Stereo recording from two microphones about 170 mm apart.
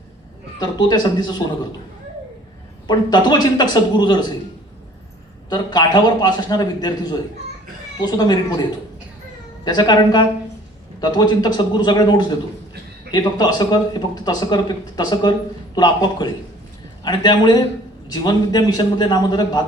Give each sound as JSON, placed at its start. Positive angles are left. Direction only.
{"t": 0.6, "sound": "speech", "side_deg": 25}
{"t": 2.8, "sound": "speech", "side_deg": 25}
{"t": 5.5, "sound": "speech", "side_deg": 25}
{"t": 9.6, "sound": "speech", "side_deg": 25}